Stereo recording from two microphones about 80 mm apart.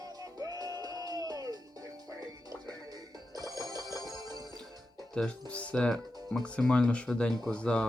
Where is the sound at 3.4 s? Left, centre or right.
Right.